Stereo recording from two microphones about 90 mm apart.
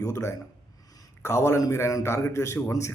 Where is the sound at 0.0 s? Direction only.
35° left (ahead or behind).